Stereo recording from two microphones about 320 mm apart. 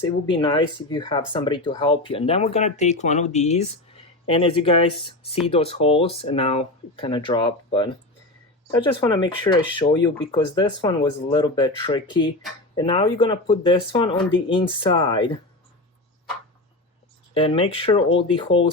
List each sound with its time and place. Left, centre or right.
0.3 s speech: centre
17.3 s speech: centre